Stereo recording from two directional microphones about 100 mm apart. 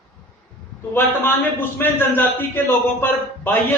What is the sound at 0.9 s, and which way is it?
A man's voice, 20° left (ahead or behind).